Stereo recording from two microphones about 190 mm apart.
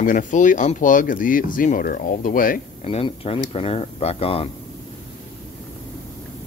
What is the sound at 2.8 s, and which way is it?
Speech, 30° left (ahead or behind).